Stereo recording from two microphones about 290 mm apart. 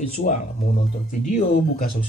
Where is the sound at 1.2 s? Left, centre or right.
Left.